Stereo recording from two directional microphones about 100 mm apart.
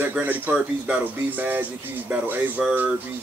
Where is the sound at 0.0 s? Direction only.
20° right (ahead or behind).